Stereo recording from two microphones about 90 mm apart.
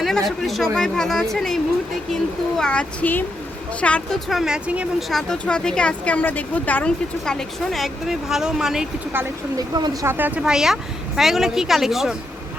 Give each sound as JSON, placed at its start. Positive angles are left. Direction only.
{"t": 0.0, "sound": "a woman's voice", "side_deg": 5}
{"t": 2.6, "sound": "speech", "side_deg": 10}
{"t": 4.3, "sound": "speech", "side_deg": -5}
{"t": 4.9, "sound": "speech", "side_deg": 0}
{"t": 9.6, "sound": "speech", "side_deg": -45}
{"t": 10.1, "sound": "a woman's voice", "side_deg": -20}
{"t": 10.4, "sound": "a woman's voice", "side_deg": -5}